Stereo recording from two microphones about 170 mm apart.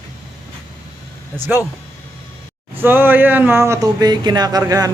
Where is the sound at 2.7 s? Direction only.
10° right (ahead or behind).